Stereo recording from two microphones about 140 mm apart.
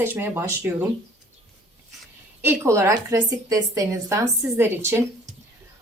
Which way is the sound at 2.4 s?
20° right (ahead or behind).